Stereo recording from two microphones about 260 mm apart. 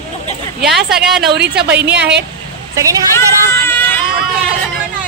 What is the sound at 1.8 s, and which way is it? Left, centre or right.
Speech, centre.